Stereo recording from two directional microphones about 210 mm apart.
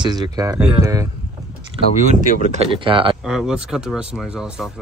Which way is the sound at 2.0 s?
35° right (ahead or behind).